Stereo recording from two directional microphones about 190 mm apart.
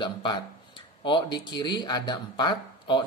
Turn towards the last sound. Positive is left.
turn(degrees=25)  # may be behind; listen again after turning